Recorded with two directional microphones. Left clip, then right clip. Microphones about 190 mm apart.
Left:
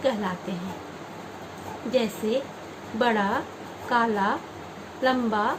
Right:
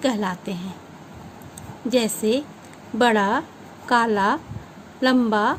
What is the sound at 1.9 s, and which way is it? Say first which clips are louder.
A woman's voice: right 4 dB; 65° right (ahead or behind).